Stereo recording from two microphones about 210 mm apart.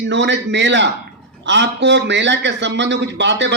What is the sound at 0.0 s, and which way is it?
A man's voice, 55° right (ahead or behind).